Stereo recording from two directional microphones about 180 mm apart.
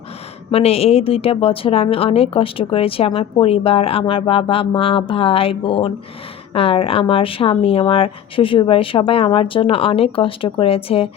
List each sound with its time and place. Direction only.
0.5 s a woman's voice: 35° left (ahead or behind)